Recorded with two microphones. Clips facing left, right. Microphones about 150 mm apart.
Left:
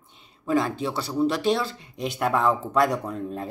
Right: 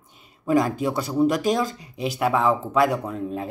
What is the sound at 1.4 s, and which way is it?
Speech, 45° right (ahead or behind).